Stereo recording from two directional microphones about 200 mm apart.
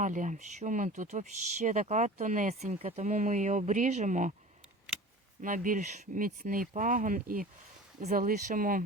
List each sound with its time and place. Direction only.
0.0 s speech: 40° right (ahead or behind)
5.4 s speech: 40° right (ahead or behind)